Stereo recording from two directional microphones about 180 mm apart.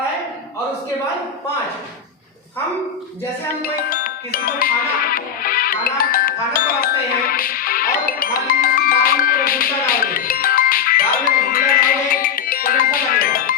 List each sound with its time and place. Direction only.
3.6 s music: 50° left (ahead or behind)